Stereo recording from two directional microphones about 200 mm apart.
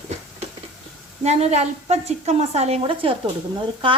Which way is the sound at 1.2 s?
30° right (ahead or behind).